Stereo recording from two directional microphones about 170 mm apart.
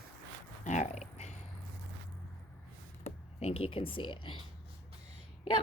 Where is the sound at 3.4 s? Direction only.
35° left (ahead or behind).